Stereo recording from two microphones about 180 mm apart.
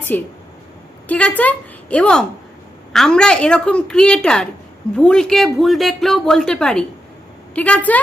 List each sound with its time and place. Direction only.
0.1 s a woman's voice: 10° left (ahead or behind)